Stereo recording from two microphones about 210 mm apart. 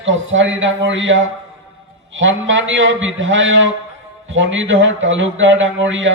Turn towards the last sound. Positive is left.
turn(degrees=-65)  # may be behind; listen again after turning